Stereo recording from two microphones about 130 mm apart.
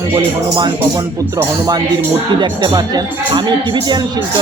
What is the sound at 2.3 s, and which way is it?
Speech, 35° right (ahead or behind).